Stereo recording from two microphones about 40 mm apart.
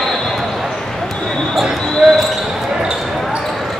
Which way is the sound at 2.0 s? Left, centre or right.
Right.